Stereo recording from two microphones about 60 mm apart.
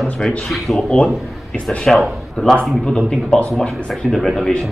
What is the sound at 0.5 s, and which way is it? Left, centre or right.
A man's voice, centre.